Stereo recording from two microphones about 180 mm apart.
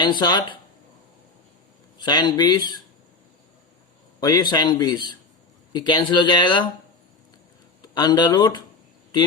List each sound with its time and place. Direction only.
0.0 s a man's voice: 25° left (ahead or behind)
2.0 s a man's voice: 25° left (ahead or behind)
4.2 s a man's voice: 20° left (ahead or behind)
7.8 s speech: 25° left (ahead or behind)